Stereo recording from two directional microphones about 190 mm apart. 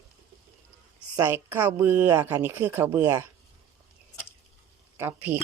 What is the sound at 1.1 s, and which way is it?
A woman's voice, 15° right (ahead or behind).